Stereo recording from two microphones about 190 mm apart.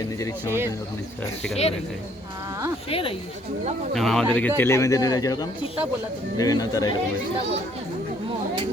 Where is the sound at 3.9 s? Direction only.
Centre (ahead or behind); by 6.9 s 20° left (ahead or behind).